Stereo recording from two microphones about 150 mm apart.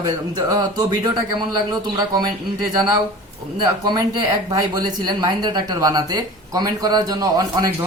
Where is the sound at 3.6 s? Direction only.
30° right (ahead or behind).